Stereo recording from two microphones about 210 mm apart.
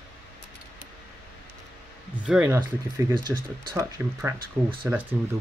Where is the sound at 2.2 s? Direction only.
5° right (ahead or behind).